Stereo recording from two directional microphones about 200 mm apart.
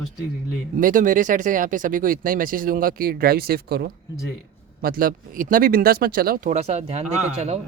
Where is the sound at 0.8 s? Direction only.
40° right (ahead or behind).